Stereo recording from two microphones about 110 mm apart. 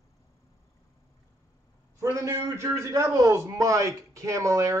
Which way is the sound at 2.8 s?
30° right (ahead or behind).